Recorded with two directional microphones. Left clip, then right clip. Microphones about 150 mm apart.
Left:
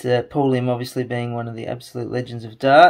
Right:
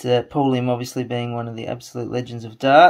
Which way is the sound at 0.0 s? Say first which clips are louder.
Even; 10° right (ahead or behind).